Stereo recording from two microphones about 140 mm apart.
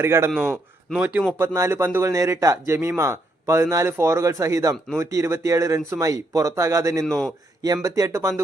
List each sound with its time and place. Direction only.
0.0 s a man's voice: 20° right (ahead or behind)
0.3 s a man's voice: centre (ahead or behind); by 7.0 s 20° right (ahead or behind)
7.0 s a man's voice: 5° left (ahead or behind)
7.3 s speech: 25° right (ahead or behind)